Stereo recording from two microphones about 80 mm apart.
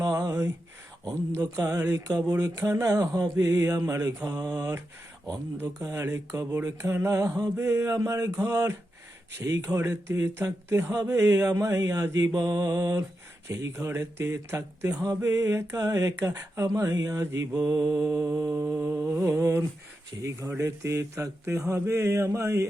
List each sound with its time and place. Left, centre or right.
0.0 s a sound: right
2.4 s speech: right
5.8 s speech: right
11.0 s a sound: right
12.3 s mantra: right
13.5 s speech: right
16.6 s a sound: right
17.7 s speech: right
18.8 s mantra: right
19.2 s speech: right